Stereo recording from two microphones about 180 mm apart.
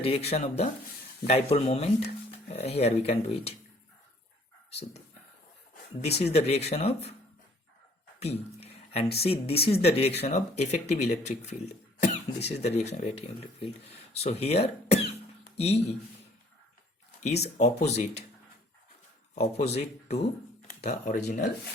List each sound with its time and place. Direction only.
0.0 s speech: 35° left (ahead or behind)
6.0 s speech: 35° left (ahead or behind)
8.2 s a sound: 35° left (ahead or behind)
9.2 s speech: 35° left (ahead or behind)
17.2 s speech: 35° left (ahead or behind)
19.3 s speech: 35° left (ahead or behind)